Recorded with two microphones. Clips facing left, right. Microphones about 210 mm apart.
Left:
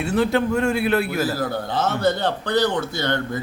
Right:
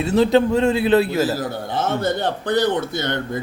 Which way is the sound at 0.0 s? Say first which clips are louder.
Right 4 dB; 20° right (ahead or behind).